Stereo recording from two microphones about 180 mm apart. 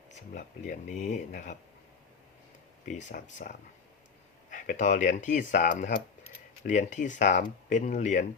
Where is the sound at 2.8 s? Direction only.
45° left (ahead or behind).